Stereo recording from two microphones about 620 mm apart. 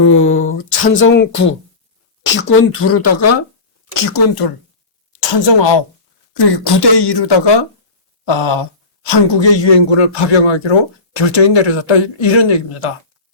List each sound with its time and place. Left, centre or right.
0.0 s a sound: centre
2.2 s speech: centre
5.3 s speech: left